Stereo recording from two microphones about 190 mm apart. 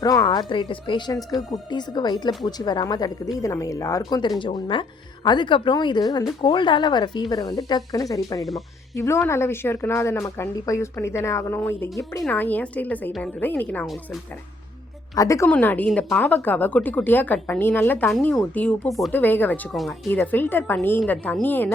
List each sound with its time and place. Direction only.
0.0 s speech: 20° left (ahead or behind)
8.4 s speech: centre (ahead or behind)
9.0 s a woman's voice: 15° left (ahead or behind)
15.1 s a woman's voice: 15° left (ahead or behind)